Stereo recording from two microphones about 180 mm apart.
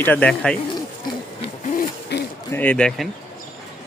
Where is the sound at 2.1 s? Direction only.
70° left (ahead or behind).